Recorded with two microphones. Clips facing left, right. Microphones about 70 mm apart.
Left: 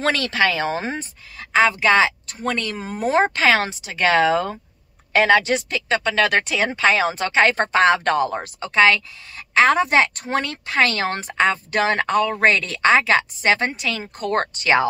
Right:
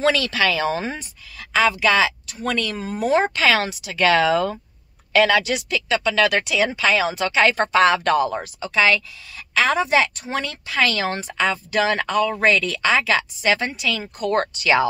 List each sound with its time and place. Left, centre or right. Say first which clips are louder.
0.0 s a woman's voice: even; left